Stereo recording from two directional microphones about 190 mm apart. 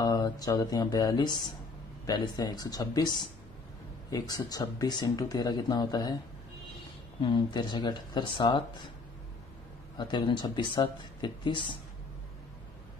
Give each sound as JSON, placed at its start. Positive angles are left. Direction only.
{"t": 0.0, "sound": "speech", "side_deg": 20}
{"t": 7.2, "sound": "speech", "side_deg": 25}
{"t": 9.9, "sound": "speech", "side_deg": 25}